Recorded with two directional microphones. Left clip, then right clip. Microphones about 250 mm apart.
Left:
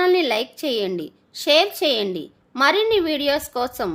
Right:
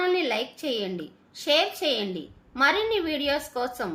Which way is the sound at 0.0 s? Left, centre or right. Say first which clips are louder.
Left 6 dB; left.